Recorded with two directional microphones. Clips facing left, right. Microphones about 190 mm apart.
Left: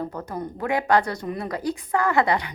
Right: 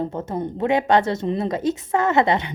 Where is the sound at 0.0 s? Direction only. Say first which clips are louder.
Right 5 dB; 25° right (ahead or behind).